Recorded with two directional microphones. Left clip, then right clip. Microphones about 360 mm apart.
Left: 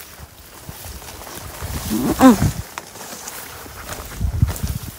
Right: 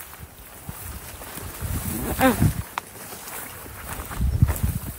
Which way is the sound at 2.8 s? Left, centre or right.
Centre.